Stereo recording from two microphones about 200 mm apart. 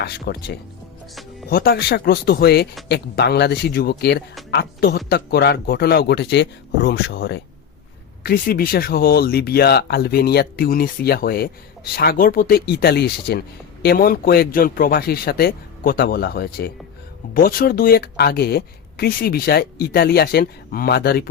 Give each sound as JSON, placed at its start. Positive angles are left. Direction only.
{"t": 0.0, "sound": "speech", "side_deg": 55}
{"t": 8.2, "sound": "speech", "side_deg": 50}